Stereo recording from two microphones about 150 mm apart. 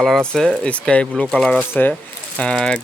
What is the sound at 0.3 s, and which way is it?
Speech, 5° left (ahead or behind).